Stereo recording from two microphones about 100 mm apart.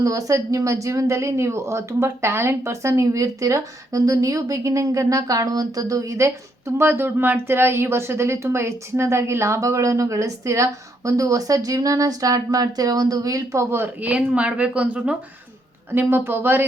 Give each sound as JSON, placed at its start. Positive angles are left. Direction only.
{"t": 0.0, "sound": "speech", "side_deg": -35}
{"t": 15.9, "sound": "speech", "side_deg": -20}